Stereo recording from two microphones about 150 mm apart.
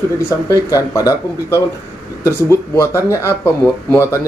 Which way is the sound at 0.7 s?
20° left (ahead or behind).